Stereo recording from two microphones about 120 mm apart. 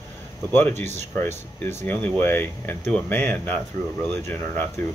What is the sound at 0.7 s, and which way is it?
Speech, 70° right (ahead or behind).